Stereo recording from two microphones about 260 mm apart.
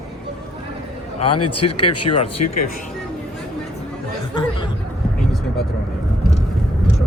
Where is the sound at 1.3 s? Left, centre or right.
Left.